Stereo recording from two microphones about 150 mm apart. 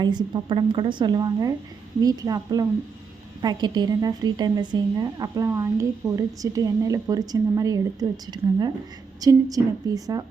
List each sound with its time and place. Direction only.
0.0 s a woman's voice: 30° right (ahead or behind)